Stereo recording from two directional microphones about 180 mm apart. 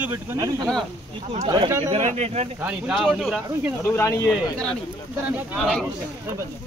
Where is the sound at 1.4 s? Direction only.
25° right (ahead or behind).